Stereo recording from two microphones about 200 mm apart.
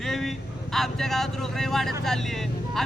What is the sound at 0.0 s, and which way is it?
Speech, centre (ahead or behind).